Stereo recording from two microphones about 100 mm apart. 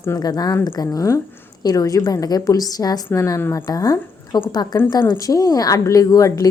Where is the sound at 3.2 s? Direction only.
30° left (ahead or behind).